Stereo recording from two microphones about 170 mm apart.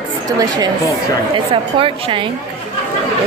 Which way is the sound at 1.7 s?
30° right (ahead or behind).